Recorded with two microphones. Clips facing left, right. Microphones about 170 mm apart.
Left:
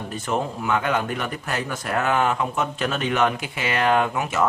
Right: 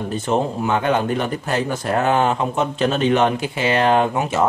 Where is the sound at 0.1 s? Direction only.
30° right (ahead or behind).